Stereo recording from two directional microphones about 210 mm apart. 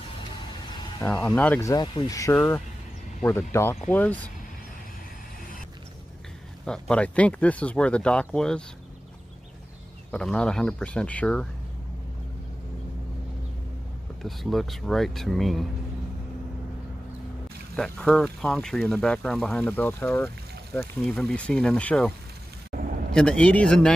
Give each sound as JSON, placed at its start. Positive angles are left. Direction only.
{"t": 1.0, "sound": "speech", "side_deg": 5}
{"t": 6.6, "sound": "speech", "side_deg": 5}
{"t": 10.1, "sound": "speech", "side_deg": 5}
{"t": 14.2, "sound": "speech", "side_deg": 0}
{"t": 17.7, "sound": "speech", "side_deg": 5}
{"t": 22.7, "sound": "a sound", "side_deg": -40}
{"t": 23.1, "sound": "speech", "side_deg": 5}